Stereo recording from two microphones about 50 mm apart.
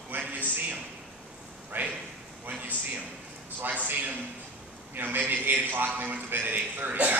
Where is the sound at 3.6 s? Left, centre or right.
Right.